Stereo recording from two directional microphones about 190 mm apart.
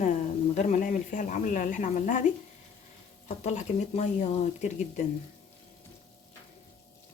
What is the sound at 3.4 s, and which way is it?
Speech, 35° left (ahead or behind).